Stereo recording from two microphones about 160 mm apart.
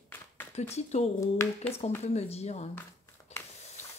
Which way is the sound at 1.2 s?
15° left (ahead or behind).